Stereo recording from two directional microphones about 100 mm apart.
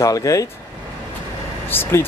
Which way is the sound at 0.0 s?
35° left (ahead or behind).